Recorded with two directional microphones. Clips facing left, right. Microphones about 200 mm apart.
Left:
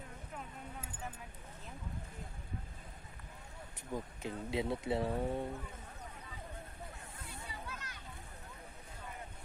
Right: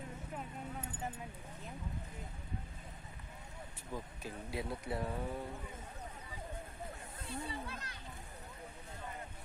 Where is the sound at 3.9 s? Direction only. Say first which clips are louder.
Left 4 dB; 20° left (ahead or behind).